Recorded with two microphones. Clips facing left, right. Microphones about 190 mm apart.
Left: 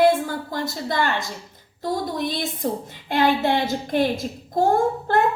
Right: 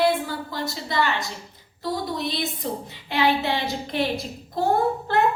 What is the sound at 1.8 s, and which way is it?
A woman's voice, 50° left (ahead or behind).